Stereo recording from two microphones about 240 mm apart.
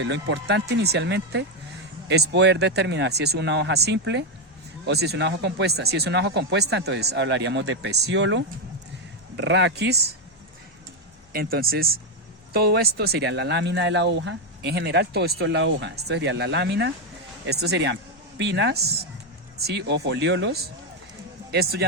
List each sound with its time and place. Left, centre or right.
0.0 s speech: right
11.3 s speech: right